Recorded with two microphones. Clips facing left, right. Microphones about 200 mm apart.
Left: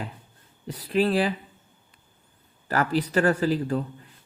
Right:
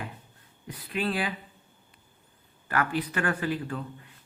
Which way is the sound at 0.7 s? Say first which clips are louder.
Left 8 dB; 35° left (ahead or behind).